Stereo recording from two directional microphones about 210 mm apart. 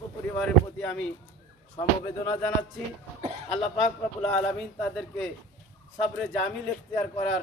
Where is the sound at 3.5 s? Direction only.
Centre (ahead or behind).